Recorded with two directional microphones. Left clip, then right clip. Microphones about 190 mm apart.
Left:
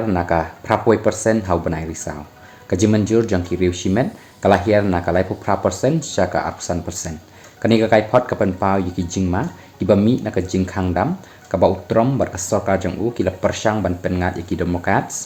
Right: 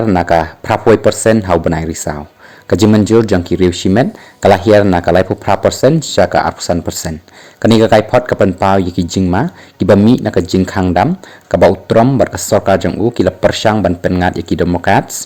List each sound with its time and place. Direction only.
0.1 s speech: 40° right (ahead or behind)